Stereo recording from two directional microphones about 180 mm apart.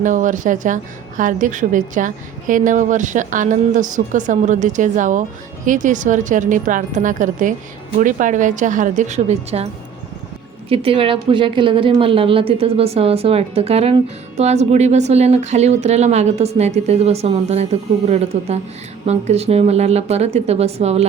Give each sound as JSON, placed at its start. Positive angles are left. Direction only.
{"t": 0.0, "sound": "a woman's voice", "side_deg": -45}
{"t": 10.7, "sound": "a woman's voice", "side_deg": -30}